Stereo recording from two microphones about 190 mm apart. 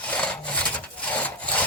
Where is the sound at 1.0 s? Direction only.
5° left (ahead or behind).